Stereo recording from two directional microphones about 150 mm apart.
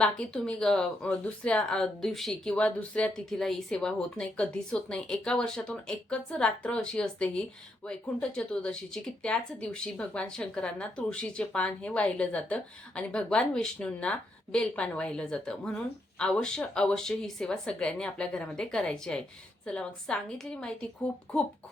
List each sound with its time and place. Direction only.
0.0 s speech: 5° left (ahead or behind)